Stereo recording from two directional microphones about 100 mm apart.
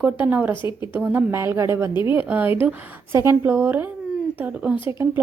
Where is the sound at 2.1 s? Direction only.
20° right (ahead or behind).